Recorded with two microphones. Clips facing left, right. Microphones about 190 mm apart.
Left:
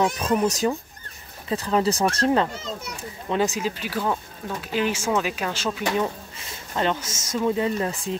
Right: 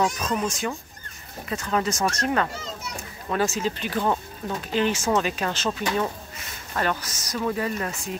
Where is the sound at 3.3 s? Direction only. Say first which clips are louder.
Left 1 dB; 15° left (ahead or behind).